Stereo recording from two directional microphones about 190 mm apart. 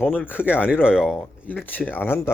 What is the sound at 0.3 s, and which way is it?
Speech, 10° left (ahead or behind).